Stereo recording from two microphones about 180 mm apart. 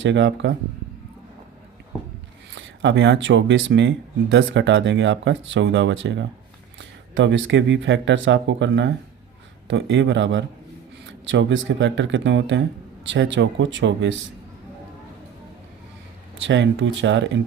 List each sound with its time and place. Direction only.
0.0 s speech: 90° right
2.6 s speech: 80° right
16.5 s speech: 90° right